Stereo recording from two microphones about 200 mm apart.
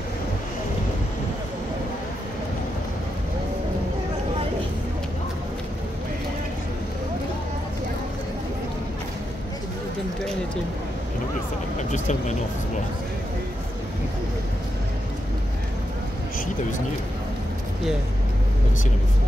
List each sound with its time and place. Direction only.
11.9 s speech: 35° left (ahead or behind)